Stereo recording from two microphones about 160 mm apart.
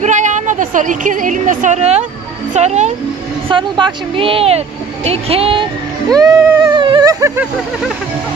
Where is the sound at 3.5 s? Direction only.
30° right (ahead or behind).